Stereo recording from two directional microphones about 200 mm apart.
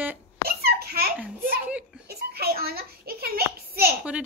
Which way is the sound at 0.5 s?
50° right (ahead or behind).